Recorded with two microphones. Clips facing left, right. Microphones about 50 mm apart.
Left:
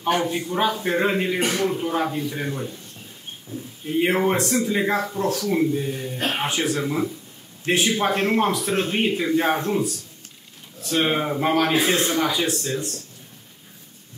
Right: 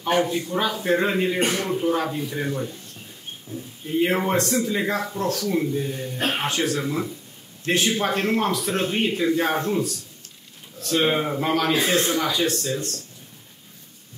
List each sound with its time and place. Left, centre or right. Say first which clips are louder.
0.3 s speech: left 2 dB; centre
4.1 s speech: left 1 dB; centre
11.0 s speech: even; centre
11.7 s a man's voice: left 1 dB; left
12.0 s speech: even; centre